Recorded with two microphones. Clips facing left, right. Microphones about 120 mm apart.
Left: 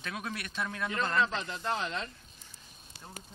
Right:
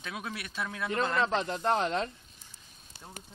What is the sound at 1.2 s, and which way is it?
Speech, 50° right (ahead or behind).